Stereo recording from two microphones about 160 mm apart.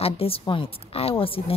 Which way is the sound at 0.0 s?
35° left (ahead or behind).